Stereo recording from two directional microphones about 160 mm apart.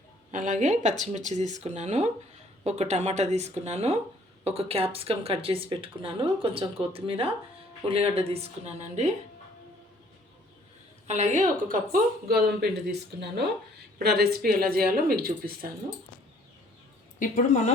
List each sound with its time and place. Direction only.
0.3 s speech: 50° right (ahead or behind)
11.0 s speech: 45° right (ahead or behind); by 13.0 s 80° right
14.0 s speech: 80° right
17.2 s a woman's voice: 50° left (ahead or behind)